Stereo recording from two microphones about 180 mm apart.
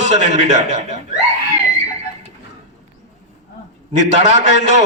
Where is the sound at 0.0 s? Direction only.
40° right (ahead or behind).